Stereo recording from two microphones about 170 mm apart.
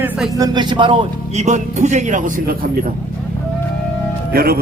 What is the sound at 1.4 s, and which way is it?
A man's voice, 45° right (ahead or behind).